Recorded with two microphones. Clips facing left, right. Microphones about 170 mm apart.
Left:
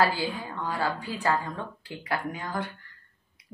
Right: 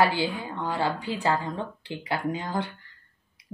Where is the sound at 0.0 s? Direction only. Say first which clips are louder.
Right 2 dB; 25° right (ahead or behind).